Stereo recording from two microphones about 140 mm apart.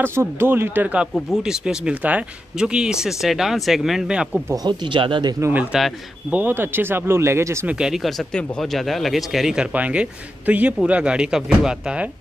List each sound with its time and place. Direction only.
0.0 s speech: 15° right (ahead or behind)
1.1 s speech: centre (ahead or behind)
4.6 s speech: 35° right (ahead or behind)
5.4 s speech: 10° right (ahead or behind)
6.4 s speech: 15° right (ahead or behind)
7.8 s speech: centre (ahead or behind)